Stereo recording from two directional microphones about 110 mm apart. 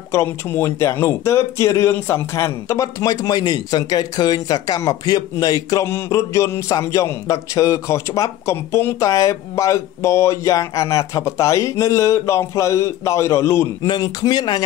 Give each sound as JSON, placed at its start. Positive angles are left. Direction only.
{"t": 0.1, "sound": "a man's voice", "side_deg": 20}